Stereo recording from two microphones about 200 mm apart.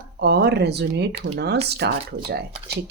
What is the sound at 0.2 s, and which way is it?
Speech, 55° right (ahead or behind).